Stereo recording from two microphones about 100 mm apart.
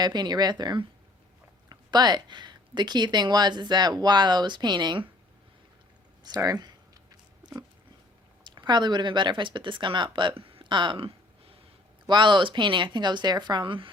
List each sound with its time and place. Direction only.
0.0 s speech: 45° right (ahead or behind)
6.2 s a sound: 40° right (ahead or behind)
8.4 s speech: 50° right (ahead or behind)